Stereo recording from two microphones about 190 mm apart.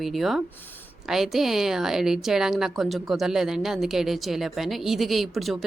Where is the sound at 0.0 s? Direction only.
Centre (ahead or behind).